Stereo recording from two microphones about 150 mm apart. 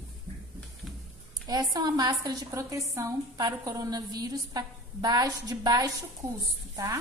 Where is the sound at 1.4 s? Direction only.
25° right (ahead or behind).